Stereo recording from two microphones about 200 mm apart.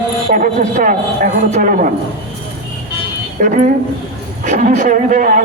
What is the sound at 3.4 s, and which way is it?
A man's voice, 40° right (ahead or behind).